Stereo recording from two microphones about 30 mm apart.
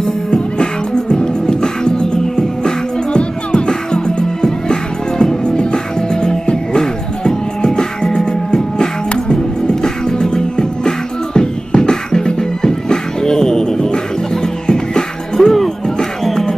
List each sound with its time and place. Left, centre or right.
0.0 s music: left
15.5 s music: centre